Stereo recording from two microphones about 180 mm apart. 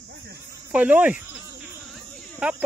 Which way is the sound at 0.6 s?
10° right (ahead or behind).